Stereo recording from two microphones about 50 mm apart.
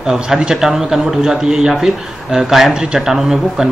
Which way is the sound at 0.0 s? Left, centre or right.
Centre.